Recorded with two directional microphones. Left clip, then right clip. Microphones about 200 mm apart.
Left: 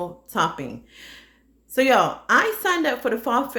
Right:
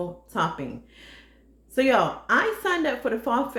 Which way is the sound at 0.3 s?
45° left (ahead or behind).